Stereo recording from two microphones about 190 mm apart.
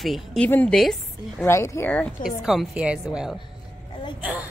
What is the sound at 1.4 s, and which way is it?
Speech, 15° left (ahead or behind).